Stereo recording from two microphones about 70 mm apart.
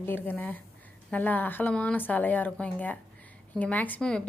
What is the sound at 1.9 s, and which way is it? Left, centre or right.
A woman's voice, left.